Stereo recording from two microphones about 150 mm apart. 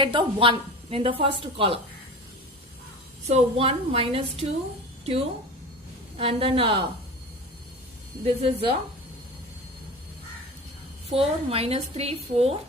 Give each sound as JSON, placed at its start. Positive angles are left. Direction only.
{"t": 0.0, "sound": "a woman's voice", "side_deg": -35}
{"t": 3.2, "sound": "a woman's voice", "side_deg": -45}
{"t": 6.1, "sound": "a woman's voice", "side_deg": -40}
{"t": 8.2, "sound": "a woman's voice", "side_deg": -40}
{"t": 11.2, "sound": "a woman's voice", "side_deg": -40}